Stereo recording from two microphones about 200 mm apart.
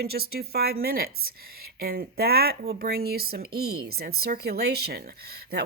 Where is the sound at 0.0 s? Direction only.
50° right (ahead or behind).